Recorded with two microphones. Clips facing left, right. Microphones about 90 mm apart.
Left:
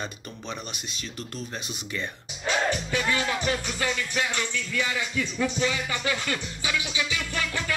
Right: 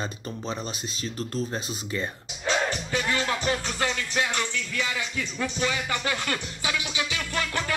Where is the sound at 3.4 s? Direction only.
25° right (ahead or behind).